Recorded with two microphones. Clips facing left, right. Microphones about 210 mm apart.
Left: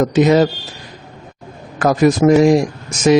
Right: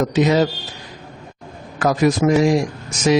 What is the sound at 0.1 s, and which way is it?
Speech, 50° left (ahead or behind).